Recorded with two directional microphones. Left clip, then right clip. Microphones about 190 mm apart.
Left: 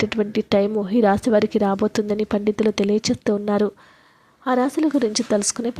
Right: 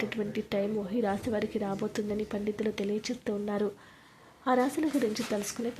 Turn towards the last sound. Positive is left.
turn(degrees=35)  # may be behind; listen again after turning